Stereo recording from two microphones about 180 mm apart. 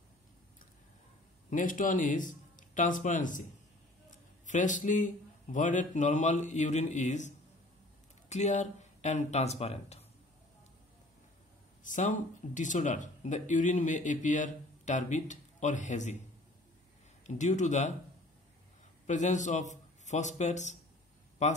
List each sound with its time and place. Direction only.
1.5 s a man's voice: 45° left (ahead or behind)
11.8 s speech: 45° left (ahead or behind)
17.3 s speech: 40° left (ahead or behind)
19.0 s a man's voice: 40° left (ahead or behind)